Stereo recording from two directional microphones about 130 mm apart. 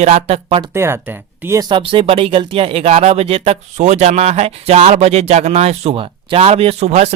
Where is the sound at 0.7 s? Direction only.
20° right (ahead or behind).